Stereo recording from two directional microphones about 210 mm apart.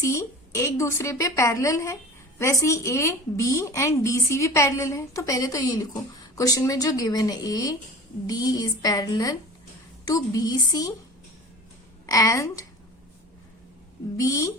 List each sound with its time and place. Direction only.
0.0 s a woman's voice: 15° left (ahead or behind)
12.0 s a woman's voice: 15° left (ahead or behind)
14.2 s a woman's voice: 15° left (ahead or behind)